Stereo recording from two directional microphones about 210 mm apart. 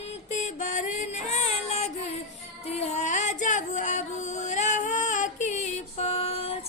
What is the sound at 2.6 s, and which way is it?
Music, 30° left (ahead or behind).